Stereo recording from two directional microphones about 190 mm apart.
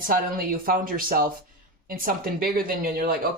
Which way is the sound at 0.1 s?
50° right (ahead or behind).